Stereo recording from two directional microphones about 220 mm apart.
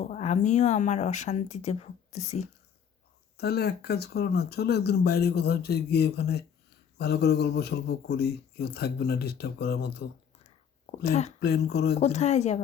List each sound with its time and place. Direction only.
0.0 s speech: 30° left (ahead or behind)
3.3 s speech: 45° left (ahead or behind)
11.0 s speech: 30° left (ahead or behind)
11.3 s speech: 45° left (ahead or behind)
11.9 s speech: 30° left (ahead or behind)